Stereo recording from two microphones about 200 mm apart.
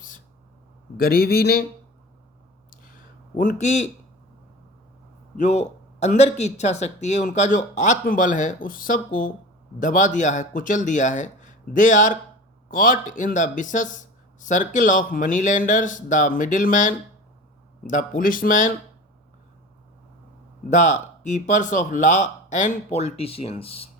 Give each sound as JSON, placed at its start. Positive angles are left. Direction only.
{"t": 0.9, "sound": "a man's voice", "side_deg": 50}
{"t": 2.6, "sound": "a sound", "side_deg": 45}
{"t": 5.4, "sound": "speech", "side_deg": 35}
{"t": 20.7, "sound": "speech", "side_deg": 35}